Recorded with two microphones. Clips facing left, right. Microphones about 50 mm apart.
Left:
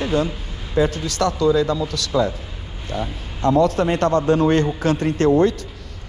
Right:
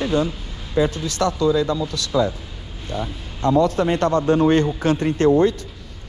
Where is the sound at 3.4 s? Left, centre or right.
Left.